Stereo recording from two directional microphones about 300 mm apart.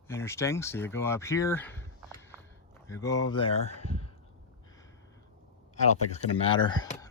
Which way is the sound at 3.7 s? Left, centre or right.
Left.